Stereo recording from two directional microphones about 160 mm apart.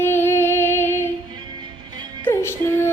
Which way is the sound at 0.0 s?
15° left (ahead or behind).